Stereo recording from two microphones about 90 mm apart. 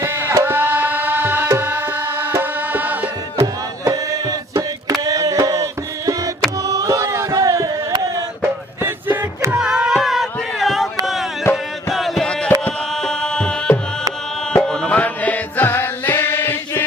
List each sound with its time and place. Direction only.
0.0 s tabla: 30° right (ahead or behind)
3.3 s music: 40° right (ahead or behind)
8.4 s music: 25° right (ahead or behind)
9.5 s a sound: 10° right (ahead or behind)
11.0 s music: centre (ahead or behind); by 16.8 s 25° left (ahead or behind)